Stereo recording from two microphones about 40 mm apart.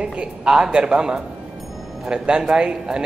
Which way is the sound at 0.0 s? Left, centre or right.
Right.